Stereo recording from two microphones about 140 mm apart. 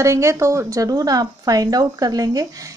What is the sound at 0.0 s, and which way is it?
A woman's voice, 20° right (ahead or behind).